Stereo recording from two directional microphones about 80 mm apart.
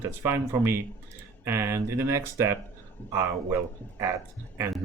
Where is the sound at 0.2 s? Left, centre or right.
Right.